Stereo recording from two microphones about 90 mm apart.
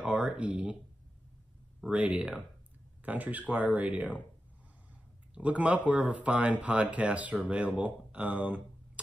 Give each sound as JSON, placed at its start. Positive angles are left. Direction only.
{"t": 0.0, "sound": "a sound", "side_deg": -10}
{"t": 1.9, "sound": "speech", "side_deg": -15}
{"t": 5.3, "sound": "speech", "side_deg": -15}